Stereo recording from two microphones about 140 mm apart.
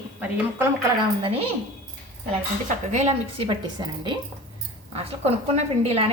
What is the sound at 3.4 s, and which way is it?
Speech, 35° right (ahead or behind).